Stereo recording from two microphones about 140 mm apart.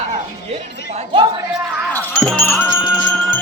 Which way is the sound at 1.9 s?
10° left (ahead or behind).